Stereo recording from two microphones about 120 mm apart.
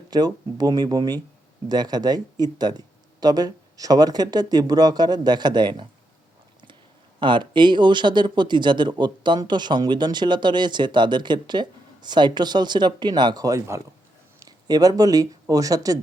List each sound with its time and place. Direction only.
0.1 s speech: 35° right (ahead or behind)
7.2 s speech: 40° right (ahead or behind)